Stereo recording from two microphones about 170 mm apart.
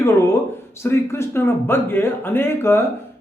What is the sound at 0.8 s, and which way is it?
Speech, 15° left (ahead or behind).